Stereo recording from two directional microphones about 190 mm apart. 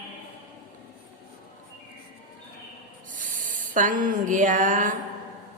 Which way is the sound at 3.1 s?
45° right (ahead or behind).